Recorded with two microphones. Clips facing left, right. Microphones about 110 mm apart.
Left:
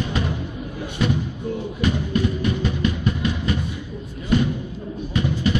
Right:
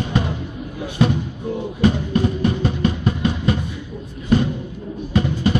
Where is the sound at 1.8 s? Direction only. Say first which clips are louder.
Right 4 dB; 35° right (ahead or behind).